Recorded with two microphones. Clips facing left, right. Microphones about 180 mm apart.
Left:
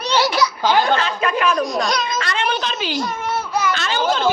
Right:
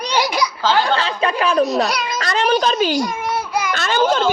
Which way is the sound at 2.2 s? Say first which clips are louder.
Right 5 dB; 40° right (ahead or behind).